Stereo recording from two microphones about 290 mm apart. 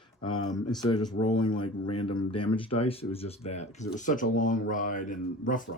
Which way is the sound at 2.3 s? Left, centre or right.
Centre.